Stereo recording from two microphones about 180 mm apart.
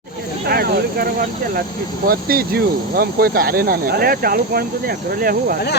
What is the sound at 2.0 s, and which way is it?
Speech, 55° right (ahead or behind).